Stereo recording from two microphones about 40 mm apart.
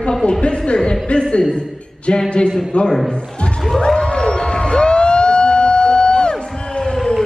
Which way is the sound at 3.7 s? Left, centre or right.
Centre.